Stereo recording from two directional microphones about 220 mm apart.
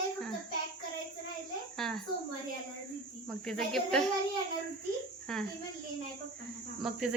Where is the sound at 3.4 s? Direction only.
Centre (ahead or behind).